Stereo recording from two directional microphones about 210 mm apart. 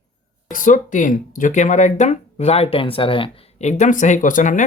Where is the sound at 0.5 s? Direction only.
35° left (ahead or behind).